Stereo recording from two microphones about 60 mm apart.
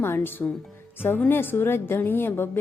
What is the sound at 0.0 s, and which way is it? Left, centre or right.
Speech, left.